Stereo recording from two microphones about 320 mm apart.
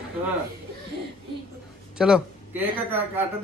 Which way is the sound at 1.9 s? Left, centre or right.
Centre.